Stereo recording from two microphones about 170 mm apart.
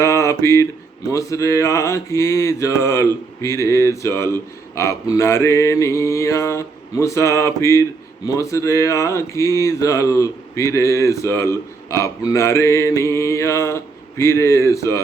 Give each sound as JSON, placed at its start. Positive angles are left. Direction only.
{"t": 0.0, "sound": "mantra", "side_deg": 15}